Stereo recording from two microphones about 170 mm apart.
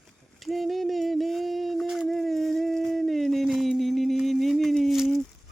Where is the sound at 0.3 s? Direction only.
Centre (ahead or behind).